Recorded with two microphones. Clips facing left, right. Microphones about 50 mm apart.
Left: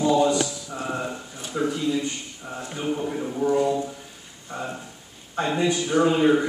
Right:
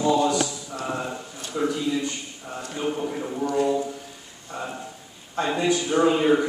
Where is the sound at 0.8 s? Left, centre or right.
Centre.